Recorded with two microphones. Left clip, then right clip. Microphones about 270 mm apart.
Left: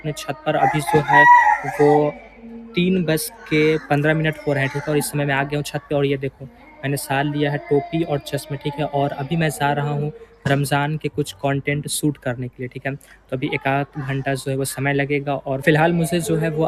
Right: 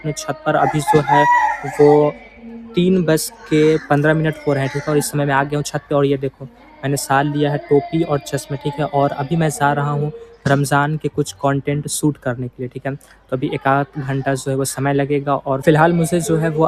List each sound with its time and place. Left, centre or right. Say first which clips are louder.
0.0 s speech: right 3 dB; centre
1.8 s a sound: right 5 dB; right
2.7 s speech: right 4 dB; centre